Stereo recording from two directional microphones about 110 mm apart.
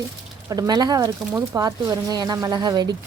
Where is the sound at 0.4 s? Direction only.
35° right (ahead or behind).